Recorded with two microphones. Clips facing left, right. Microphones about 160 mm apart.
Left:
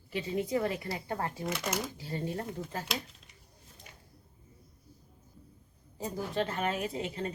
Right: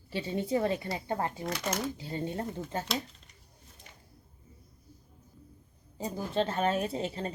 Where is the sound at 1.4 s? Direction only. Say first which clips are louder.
Right 1 dB; centre (ahead or behind).